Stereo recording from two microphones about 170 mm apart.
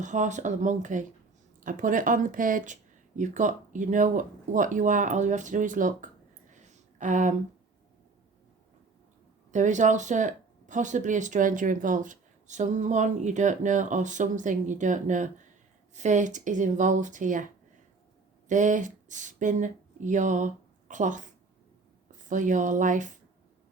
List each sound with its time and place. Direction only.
0.0 s speech: 45° right (ahead or behind)
6.5 s a sound: 45° right (ahead or behind)
9.5 s speech: 45° right (ahead or behind)
22.3 s speech: 50° right (ahead or behind)